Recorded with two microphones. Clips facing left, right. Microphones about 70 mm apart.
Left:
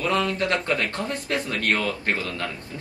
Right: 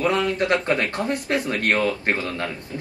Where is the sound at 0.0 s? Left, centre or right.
Right.